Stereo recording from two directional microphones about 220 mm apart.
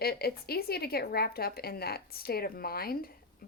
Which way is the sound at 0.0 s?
45° left (ahead or behind).